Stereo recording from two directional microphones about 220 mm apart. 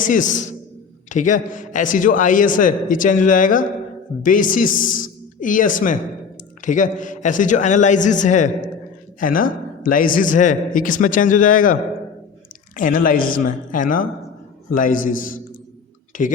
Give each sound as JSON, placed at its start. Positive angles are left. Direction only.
{"t": 0.0, "sound": "a man's voice", "side_deg": 35}